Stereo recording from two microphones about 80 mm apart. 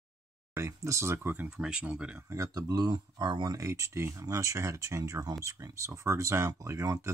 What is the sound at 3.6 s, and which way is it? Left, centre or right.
Speech, right.